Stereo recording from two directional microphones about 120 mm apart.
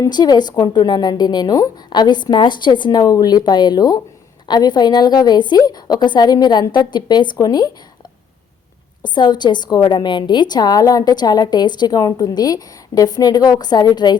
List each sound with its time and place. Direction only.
0.0 s a woman's voice: 35° left (ahead or behind)
9.0 s a woman's voice: 40° left (ahead or behind)